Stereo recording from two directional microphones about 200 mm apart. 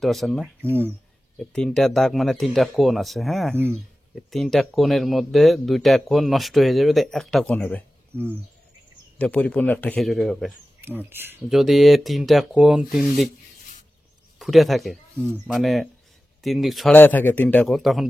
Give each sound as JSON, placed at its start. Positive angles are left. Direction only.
{"t": 0.0, "sound": "speech", "side_deg": 0}
{"t": 0.6, "sound": "speech", "side_deg": -10}
{"t": 1.4, "sound": "speech", "side_deg": 5}
{"t": 8.1, "sound": "speech", "side_deg": -10}
{"t": 9.2, "sound": "speech", "side_deg": 5}
{"t": 10.8, "sound": "speech", "side_deg": -10}
{"t": 11.4, "sound": "speech", "side_deg": 0}
{"t": 14.4, "sound": "speech", "side_deg": 0}